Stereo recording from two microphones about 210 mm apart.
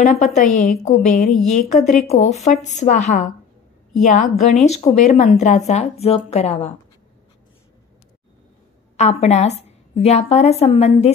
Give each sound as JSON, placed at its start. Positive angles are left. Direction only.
{"t": 0.2, "sound": "a woman's voice", "side_deg": 35}
{"t": 8.9, "sound": "a woman's voice", "side_deg": 30}